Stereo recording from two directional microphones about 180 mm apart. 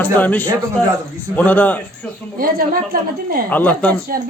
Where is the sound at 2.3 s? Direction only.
55° right (ahead or behind).